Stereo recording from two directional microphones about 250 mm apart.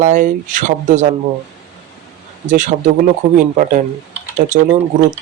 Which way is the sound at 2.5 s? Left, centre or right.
Right.